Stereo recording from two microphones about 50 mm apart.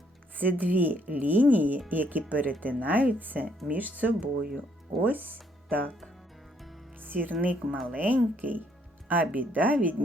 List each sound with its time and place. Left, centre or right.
0.3 s a woman's voice: right
7.0 s music: right
7.9 s a woman's voice: right